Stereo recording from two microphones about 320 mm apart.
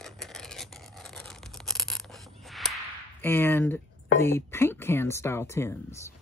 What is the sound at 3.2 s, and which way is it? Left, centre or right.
Speech, centre.